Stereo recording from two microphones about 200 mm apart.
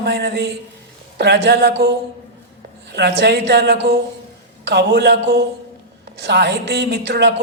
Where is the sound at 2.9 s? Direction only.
55° right (ahead or behind).